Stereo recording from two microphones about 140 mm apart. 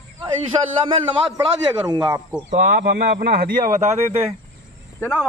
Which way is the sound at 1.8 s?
30° right (ahead or behind).